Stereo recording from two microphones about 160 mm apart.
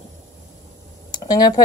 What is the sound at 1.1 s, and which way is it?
Speech, 25° left (ahead or behind).